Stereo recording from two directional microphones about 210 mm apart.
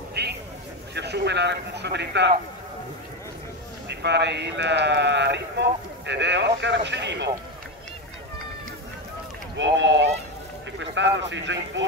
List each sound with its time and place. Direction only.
0.2 s a sound: 55° right (ahead or behind)
0.9 s a man's voice: 55° right (ahead or behind)
3.9 s a man's voice: 55° right (ahead or behind)
9.6 s a man's voice: 55° right (ahead or behind)